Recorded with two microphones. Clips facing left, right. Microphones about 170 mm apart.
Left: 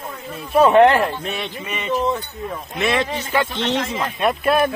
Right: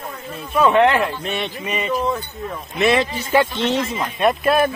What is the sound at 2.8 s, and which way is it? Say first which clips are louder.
Speech: right 4 dB; centre (ahead or behind).